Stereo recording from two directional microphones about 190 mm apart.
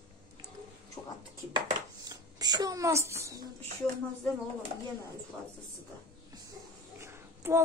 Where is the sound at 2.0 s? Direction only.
20° right (ahead or behind).